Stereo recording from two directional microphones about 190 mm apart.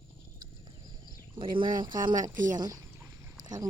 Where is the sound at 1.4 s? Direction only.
25° right (ahead or behind).